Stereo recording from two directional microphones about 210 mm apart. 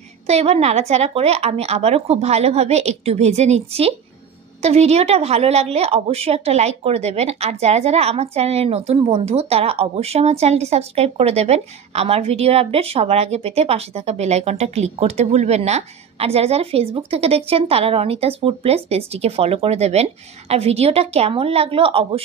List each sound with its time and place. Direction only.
0.3 s a woman's voice: 30° right (ahead or behind)